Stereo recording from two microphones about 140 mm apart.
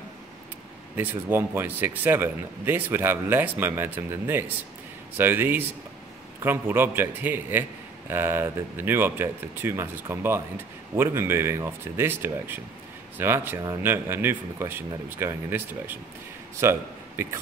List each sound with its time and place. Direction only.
0.9 s speech: 15° right (ahead or behind)